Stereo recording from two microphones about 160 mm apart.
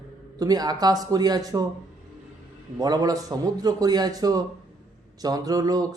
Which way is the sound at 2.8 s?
25° right (ahead or behind).